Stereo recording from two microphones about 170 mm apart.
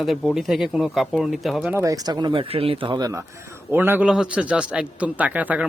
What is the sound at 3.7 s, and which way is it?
A man's voice, 10° right (ahead or behind).